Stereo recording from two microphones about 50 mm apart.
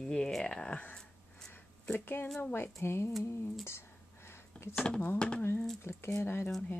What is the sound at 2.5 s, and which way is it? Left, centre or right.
Speech, left.